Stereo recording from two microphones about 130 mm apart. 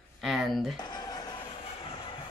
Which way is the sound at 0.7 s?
35° left (ahead or behind).